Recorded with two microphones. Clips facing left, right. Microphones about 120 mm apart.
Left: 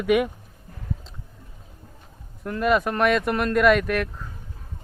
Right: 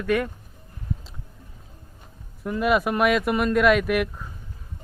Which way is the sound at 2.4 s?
5° right (ahead or behind).